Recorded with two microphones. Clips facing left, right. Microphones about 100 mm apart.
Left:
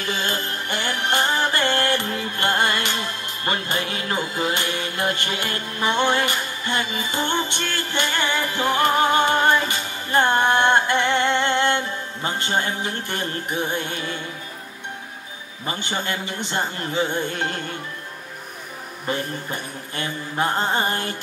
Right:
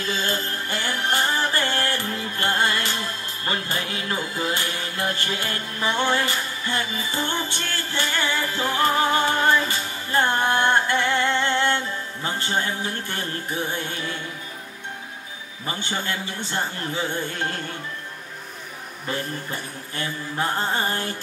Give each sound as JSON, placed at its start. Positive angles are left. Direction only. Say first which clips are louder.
{"t": 0.0, "sound": "music", "louder": "even", "side_deg": 20}
{"t": 15.6, "sound": "mantra", "louder": "left 2 dB", "side_deg": 20}
{"t": 19.0, "sound": "mantra", "louder": "left 2 dB", "side_deg": 20}